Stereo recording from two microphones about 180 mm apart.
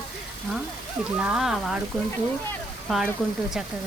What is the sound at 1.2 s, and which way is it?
Speech, 5° right (ahead or behind).